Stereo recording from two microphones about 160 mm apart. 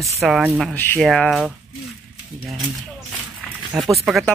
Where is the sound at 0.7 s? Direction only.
10° left (ahead or behind).